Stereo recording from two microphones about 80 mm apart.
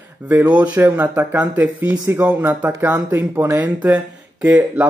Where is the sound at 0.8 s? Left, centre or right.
Right.